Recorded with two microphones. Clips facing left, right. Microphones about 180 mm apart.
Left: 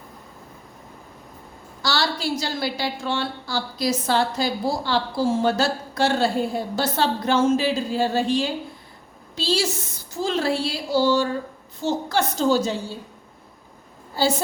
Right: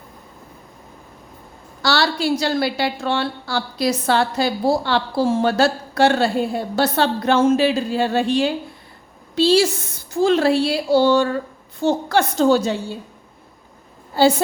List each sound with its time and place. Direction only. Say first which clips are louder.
1.8 s a woman's voice: right 5 dB; 65° right (ahead or behind)
14.2 s a woman's voice: right 7 dB; 65° right (ahead or behind)